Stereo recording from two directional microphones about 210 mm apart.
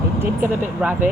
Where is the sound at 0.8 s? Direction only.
5° right (ahead or behind).